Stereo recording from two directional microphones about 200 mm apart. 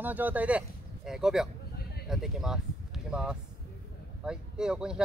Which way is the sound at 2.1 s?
Centre (ahead or behind).